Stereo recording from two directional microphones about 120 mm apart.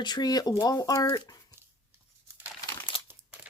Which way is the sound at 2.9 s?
50° left (ahead or behind).